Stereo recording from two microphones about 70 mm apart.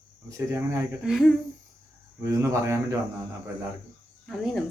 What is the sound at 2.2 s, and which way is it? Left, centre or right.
Speech, right.